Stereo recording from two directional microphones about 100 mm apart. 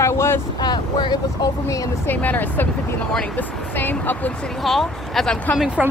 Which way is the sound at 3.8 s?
20° left (ahead or behind).